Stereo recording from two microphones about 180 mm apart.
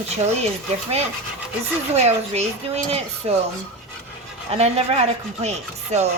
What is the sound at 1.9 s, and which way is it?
Speech, 35° right (ahead or behind).